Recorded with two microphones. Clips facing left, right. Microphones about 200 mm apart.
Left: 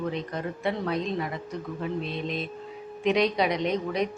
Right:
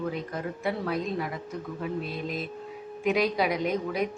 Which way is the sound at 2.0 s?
25° left (ahead or behind).